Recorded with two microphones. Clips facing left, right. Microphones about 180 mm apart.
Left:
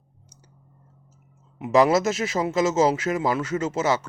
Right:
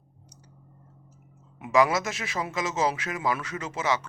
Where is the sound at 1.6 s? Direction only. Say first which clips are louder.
Left 5 dB; 25° left (ahead or behind).